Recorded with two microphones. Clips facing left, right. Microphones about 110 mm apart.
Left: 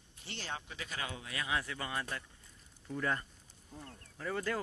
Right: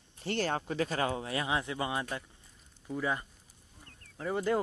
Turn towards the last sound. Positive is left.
turn(degrees=-20)  # may be behind; listen again after turning